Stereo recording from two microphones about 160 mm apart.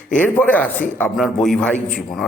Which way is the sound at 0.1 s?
10° left (ahead or behind).